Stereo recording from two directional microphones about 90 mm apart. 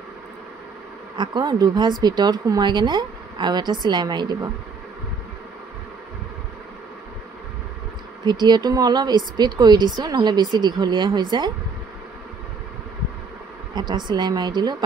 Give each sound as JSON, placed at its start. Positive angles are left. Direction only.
{"t": 1.1, "sound": "speech", "side_deg": -55}
{"t": 8.3, "sound": "speech", "side_deg": -50}
{"t": 13.7, "sound": "speech", "side_deg": -55}